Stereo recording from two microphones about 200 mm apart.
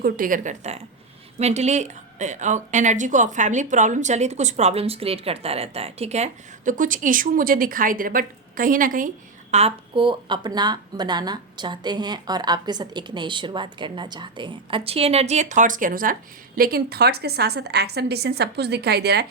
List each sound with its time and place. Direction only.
0.0 s a woman's voice: 45° right (ahead or behind)